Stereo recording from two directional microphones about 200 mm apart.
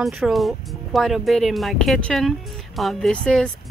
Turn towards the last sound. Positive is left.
turn(degrees=5)  # may be behind; listen again after turning